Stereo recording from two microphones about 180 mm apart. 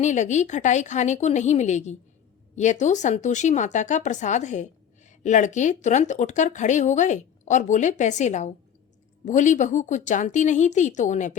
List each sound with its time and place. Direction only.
0.0 s speech: 40° left (ahead or behind)